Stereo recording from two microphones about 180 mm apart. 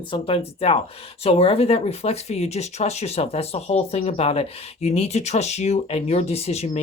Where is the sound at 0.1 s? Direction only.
30° left (ahead or behind).